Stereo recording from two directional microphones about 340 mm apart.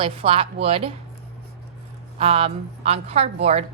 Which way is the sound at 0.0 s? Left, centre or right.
Centre.